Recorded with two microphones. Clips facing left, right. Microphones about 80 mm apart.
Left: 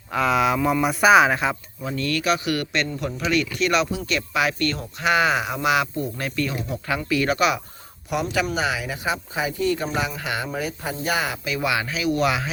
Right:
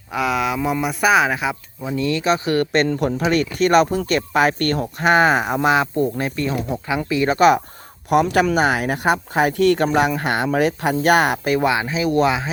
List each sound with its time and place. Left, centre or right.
0.1 s speech: centre
1.8 s speech: centre; by 2.8 s right
2.8 s speech: right
7.3 s speech: right
8.1 s speech: right
11.7 s speech: right